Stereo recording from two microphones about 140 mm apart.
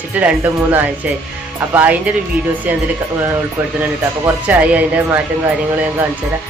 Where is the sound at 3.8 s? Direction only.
10° right (ahead or behind).